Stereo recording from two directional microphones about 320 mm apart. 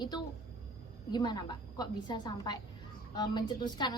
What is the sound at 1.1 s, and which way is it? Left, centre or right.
A woman's voice, centre.